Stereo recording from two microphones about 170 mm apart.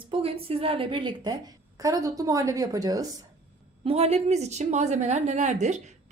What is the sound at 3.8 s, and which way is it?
A woman's voice, 35° right (ahead or behind).